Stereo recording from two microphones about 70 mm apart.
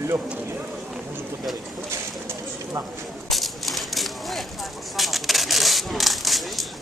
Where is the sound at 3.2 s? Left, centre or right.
Centre.